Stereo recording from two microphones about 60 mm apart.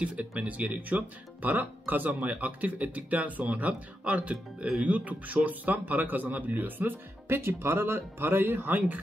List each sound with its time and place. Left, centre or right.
0.0 s speech: right